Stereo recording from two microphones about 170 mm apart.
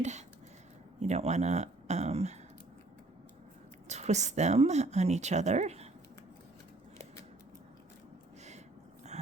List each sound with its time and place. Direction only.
0.0 s a sound: 40° right (ahead or behind)
0.9 s a woman's voice: 40° right (ahead or behind)
3.8 s a woman's voice: 40° right (ahead or behind)